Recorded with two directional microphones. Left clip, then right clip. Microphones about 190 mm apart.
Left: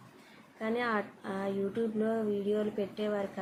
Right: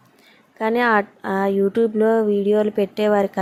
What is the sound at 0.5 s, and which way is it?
Speech, 60° right (ahead or behind).